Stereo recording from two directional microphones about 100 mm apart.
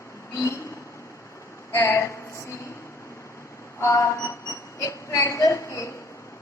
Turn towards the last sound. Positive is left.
turn(degrees=30)  # may be behind; listen again after turning